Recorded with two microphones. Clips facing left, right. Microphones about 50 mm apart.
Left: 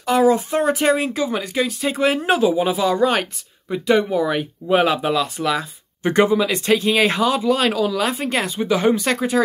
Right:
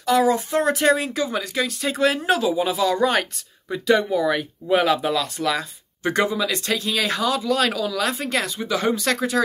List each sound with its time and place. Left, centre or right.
0.0 s speech: left
6.0 s speech: left